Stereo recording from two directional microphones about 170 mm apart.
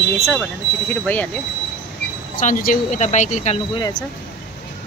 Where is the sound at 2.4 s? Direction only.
50° left (ahead or behind).